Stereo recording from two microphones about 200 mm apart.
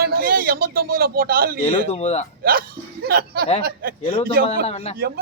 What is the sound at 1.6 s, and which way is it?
Speech, 30° left (ahead or behind).